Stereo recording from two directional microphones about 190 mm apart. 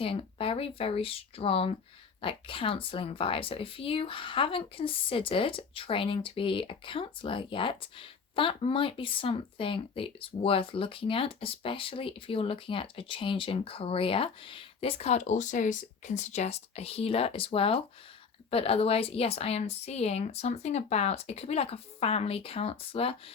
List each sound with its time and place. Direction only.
0.0 s speech: 30° left (ahead or behind)